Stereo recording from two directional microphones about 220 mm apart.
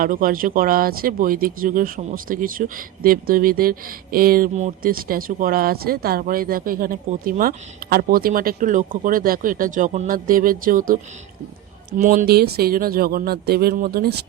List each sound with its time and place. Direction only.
0.0 s speech: 40° right (ahead or behind)